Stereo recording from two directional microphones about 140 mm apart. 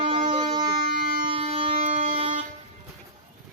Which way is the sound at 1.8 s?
60° right (ahead or behind).